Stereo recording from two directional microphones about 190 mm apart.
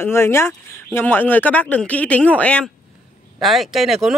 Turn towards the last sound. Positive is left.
turn(degrees=0)  # may be behind; listen again after turning